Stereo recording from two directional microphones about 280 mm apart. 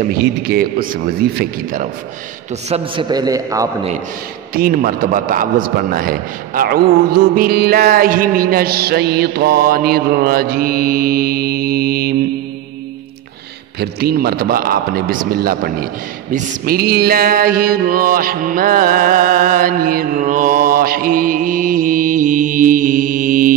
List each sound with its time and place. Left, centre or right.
0.1 s a man's voice: right
2.7 s a man's voice: centre
4.6 s a man's voice: right
13.7 s a man's voice: right